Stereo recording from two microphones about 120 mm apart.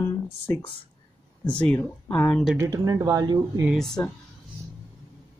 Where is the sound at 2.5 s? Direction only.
25° right (ahead or behind).